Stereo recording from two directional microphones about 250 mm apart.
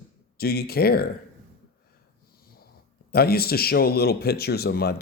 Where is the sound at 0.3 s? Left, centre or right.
Left.